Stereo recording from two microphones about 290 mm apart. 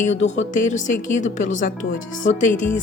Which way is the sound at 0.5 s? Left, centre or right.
Left.